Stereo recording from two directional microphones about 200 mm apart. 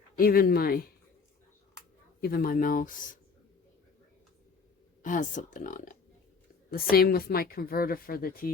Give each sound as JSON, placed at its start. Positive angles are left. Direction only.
{"t": 0.2, "sound": "a woman's voice", "side_deg": 45}
{"t": 2.2, "sound": "a woman's voice", "side_deg": 50}
{"t": 5.0, "sound": "a woman's voice", "side_deg": 40}